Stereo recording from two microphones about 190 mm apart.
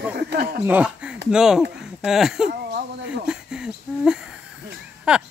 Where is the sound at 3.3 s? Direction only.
5° right (ahead or behind).